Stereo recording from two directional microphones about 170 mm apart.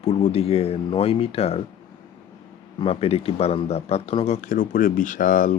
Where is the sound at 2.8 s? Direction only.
35° left (ahead or behind).